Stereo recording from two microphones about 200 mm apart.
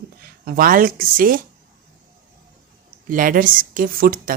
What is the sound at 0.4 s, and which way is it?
Speech, 45° right (ahead or behind).